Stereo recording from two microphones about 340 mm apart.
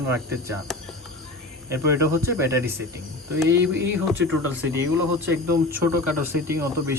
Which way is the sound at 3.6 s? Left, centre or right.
Right.